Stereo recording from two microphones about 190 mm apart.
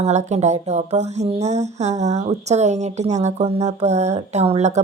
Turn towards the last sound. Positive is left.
turn(degrees=-35)  # may be behind; listen again after turning